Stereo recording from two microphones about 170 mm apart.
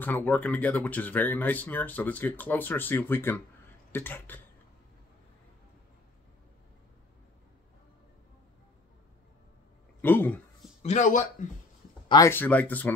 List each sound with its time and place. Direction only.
0.0 s speech: 10° left (ahead or behind)
10.0 s speech: 10° left (ahead or behind)
10.8 s speech: 45° left (ahead or behind)
12.1 s speech: 15° left (ahead or behind)